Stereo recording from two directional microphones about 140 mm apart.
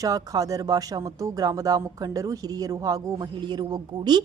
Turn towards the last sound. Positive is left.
turn(degrees=-30)  # may be behind; listen again after turning